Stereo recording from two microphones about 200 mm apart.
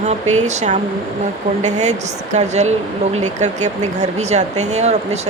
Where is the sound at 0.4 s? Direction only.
35° right (ahead or behind).